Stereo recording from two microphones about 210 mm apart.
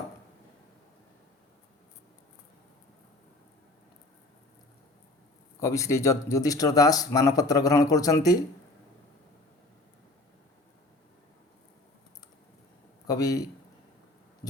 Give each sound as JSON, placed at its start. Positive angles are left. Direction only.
{"t": 5.5, "sound": "speech", "side_deg": 15}
{"t": 13.1, "sound": "a man's voice", "side_deg": 15}